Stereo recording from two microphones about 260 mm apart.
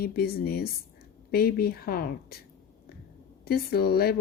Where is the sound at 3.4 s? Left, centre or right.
Left.